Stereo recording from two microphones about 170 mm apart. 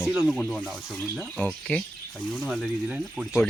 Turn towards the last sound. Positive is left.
turn(degrees=-5)  # may be behind; listen again after turning